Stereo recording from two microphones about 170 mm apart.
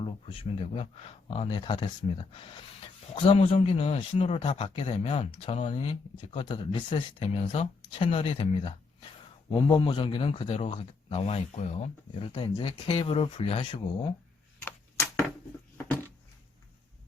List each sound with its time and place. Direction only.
0.7 s speech: 35° left (ahead or behind)
3.2 s speech: 35° left (ahead or behind)
14.6 s a sound: 15° left (ahead or behind)